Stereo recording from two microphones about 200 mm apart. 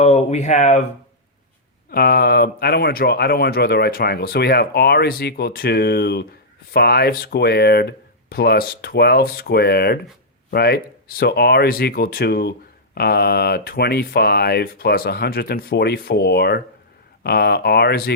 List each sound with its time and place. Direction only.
0.0 s speech: 35° left (ahead or behind)
1.9 s speech: 50° left (ahead or behind)